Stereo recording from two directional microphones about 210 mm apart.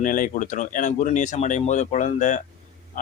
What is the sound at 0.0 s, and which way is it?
Speech, 40° left (ahead or behind).